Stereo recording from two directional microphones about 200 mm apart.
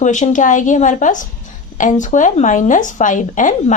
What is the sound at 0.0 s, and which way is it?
Speech, 40° left (ahead or behind).